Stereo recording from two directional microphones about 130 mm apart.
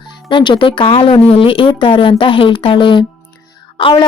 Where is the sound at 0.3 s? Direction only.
40° left (ahead or behind).